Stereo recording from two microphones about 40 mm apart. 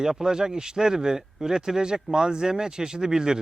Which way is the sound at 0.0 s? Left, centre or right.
Centre.